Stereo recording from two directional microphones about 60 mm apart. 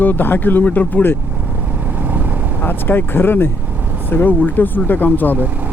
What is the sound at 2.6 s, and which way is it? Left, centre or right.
Speech, left.